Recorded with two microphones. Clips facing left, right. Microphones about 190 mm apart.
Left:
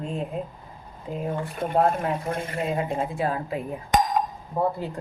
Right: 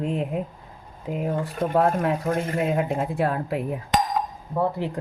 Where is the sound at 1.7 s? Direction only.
70° right (ahead or behind).